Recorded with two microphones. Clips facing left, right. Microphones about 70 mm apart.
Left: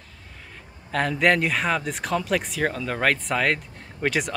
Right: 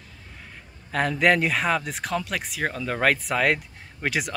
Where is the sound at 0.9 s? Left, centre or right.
Centre.